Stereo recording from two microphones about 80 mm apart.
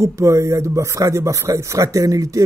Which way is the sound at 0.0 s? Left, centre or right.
Right.